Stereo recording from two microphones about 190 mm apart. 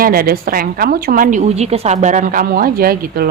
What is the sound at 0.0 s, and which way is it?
Speech, 50° right (ahead or behind).